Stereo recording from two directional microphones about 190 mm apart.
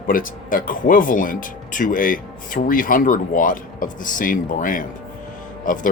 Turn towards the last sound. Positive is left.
turn(degrees=45)  # may be behind; listen again after turning